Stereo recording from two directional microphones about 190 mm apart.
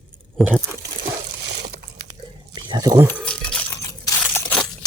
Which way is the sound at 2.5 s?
20° right (ahead or behind).